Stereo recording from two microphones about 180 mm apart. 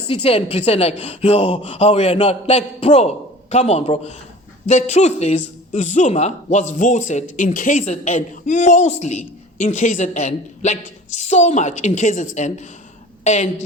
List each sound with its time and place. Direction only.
0.1 s speech: 30° left (ahead or behind)